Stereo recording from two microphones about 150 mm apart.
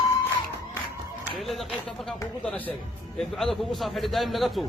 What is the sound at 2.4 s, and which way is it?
A man's voice, 10° left (ahead or behind).